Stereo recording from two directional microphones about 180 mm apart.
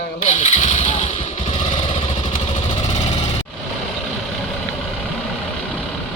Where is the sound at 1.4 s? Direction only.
30° left (ahead or behind).